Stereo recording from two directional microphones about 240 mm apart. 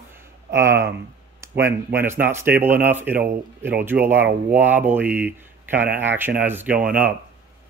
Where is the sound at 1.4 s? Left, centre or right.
Centre.